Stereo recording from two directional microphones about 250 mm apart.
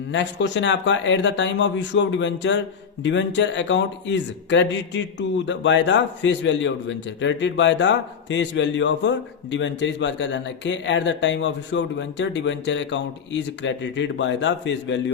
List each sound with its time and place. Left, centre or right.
0.1 s a man's voice: left